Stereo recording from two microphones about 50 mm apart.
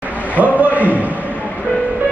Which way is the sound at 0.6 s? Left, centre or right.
Right.